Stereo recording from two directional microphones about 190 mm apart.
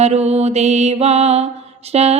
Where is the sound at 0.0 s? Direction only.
35° right (ahead or behind).